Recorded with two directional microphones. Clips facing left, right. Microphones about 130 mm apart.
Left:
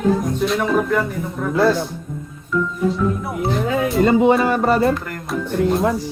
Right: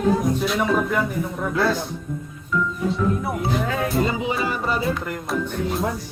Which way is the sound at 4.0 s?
55° left (ahead or behind).